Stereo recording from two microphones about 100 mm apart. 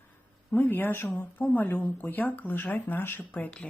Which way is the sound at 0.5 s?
20° left (ahead or behind).